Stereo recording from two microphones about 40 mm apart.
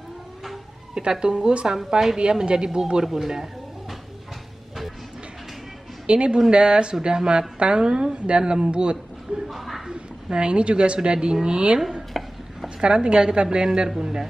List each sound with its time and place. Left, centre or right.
1.2 s a woman's voice: centre
1.9 s speech: centre
2.1 s speech: right
6.0 s a woman's voice: right
9.5 s speech: centre
9.9 s a woman's voice: right
12.1 s chopping: centre
12.6 s a woman's voice: right
13.7 s speech: centre